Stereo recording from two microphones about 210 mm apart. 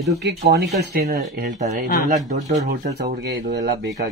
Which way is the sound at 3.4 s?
55° right (ahead or behind).